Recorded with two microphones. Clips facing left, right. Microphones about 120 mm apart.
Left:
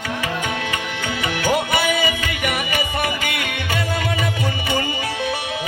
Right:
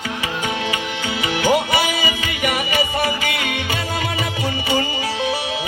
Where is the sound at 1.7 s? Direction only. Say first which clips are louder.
Left 1 dB; 50° left (ahead or behind).